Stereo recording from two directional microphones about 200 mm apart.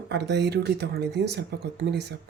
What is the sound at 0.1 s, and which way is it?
Speech, 60° right (ahead or behind).